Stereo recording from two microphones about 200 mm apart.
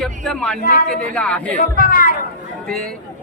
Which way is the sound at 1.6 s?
45° left (ahead or behind).